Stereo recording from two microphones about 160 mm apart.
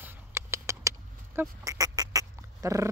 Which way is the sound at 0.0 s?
15° right (ahead or behind).